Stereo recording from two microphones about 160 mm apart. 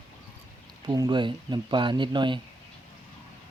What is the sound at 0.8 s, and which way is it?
Speech, 25° right (ahead or behind).